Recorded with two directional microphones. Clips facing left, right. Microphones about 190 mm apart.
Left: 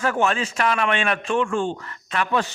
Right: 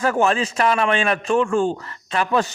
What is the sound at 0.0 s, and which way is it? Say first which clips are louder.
A man's voice: right 3 dB; 35° right (ahead or behind).